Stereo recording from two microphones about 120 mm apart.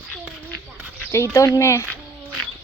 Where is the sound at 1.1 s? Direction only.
25° left (ahead or behind).